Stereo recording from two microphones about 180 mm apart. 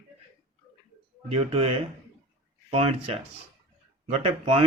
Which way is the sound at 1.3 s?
30° right (ahead or behind).